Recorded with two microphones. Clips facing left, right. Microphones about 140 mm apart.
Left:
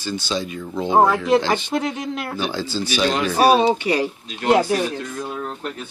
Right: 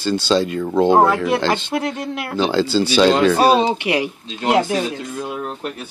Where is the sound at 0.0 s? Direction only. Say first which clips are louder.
Right 8 dB; 70° right (ahead or behind).